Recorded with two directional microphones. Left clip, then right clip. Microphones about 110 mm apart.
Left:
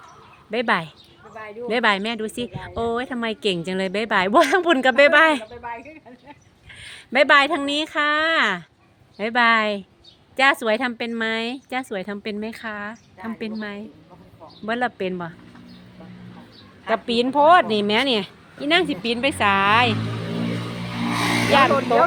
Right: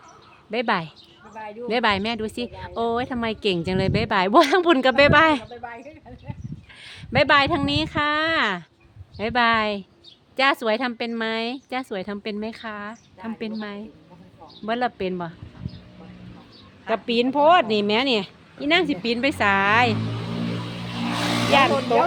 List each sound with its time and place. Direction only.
0.5 s a woman's voice: 15° right (ahead or behind)
6.7 s a woman's voice: 20° right (ahead or behind)
16.8 s a woman's voice: 20° right (ahead or behind)
21.1 s vehicle: centre (ahead or behind)
21.6 s a woman's voice: 25° right (ahead or behind)